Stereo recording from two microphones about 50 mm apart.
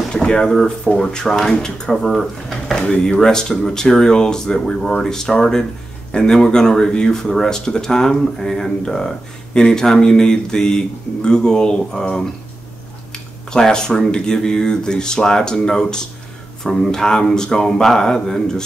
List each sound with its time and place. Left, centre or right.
0.1 s speech: centre
2.7 s speech: centre